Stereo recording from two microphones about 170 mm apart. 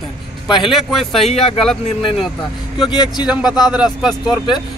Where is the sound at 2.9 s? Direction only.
25° left (ahead or behind).